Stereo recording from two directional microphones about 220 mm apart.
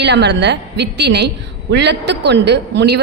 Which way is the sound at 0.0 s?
50° right (ahead or behind).